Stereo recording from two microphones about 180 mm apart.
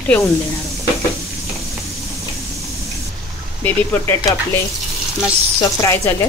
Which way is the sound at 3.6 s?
10° left (ahead or behind).